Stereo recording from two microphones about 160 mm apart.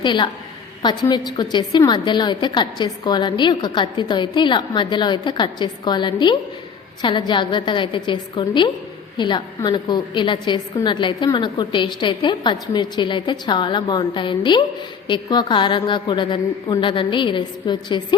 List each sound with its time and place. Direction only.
0.0 s a woman's voice: 30° left (ahead or behind)